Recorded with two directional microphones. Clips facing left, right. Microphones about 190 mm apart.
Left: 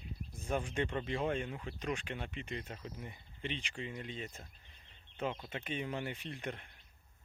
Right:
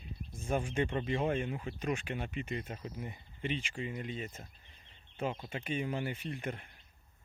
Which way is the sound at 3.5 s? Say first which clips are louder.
Right 5 dB; 5° right (ahead or behind).